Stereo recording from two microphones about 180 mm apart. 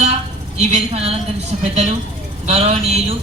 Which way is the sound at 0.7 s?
35° right (ahead or behind).